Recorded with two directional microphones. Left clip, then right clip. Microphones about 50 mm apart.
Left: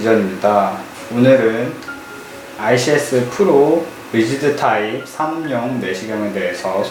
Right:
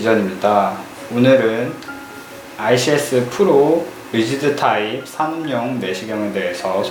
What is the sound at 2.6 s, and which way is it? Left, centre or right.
Speech, right.